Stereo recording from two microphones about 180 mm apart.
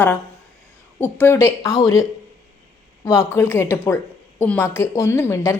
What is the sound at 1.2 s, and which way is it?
Speech, 15° left (ahead or behind).